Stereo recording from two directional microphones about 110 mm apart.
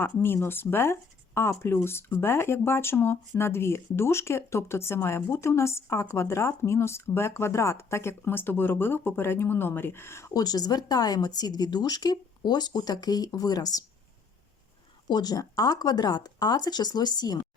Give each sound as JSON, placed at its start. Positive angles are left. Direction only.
{"t": 0.0, "sound": "speech", "side_deg": 20}
{"t": 15.1, "sound": "speech", "side_deg": 35}